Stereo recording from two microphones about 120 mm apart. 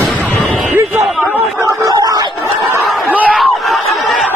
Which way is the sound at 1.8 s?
30° right (ahead or behind).